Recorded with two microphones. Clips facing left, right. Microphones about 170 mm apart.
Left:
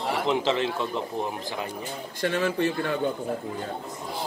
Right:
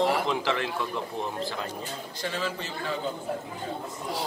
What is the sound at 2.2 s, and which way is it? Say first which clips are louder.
Speech: left 8 dB; 55° left (ahead or behind).